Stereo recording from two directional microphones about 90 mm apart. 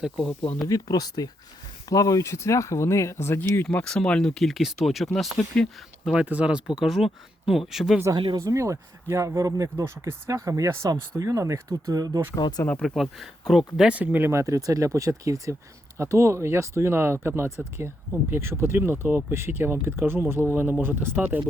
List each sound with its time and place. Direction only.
0.0 s speech: centre (ahead or behind)
0.7 s speech: 50° left (ahead or behind); by 3.7 s 25° left (ahead or behind)
3.7 s speech: 10° left (ahead or behind)
6.1 s speech: 15° right (ahead or behind)
8.1 s speech: 60° right (ahead or behind)
8.4 s speech: 35° right (ahead or behind)
12.4 s speech: 50° left (ahead or behind)
12.8 s speech: centre (ahead or behind)
13.8 s speech: 15° right (ahead or behind)